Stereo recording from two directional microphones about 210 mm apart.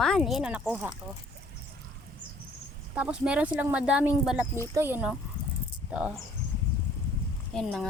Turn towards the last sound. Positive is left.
turn(degrees=0)  # may be behind; listen again after turning